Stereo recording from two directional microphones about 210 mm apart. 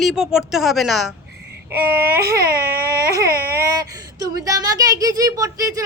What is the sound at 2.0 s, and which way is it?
Baby cry, 45° right (ahead or behind).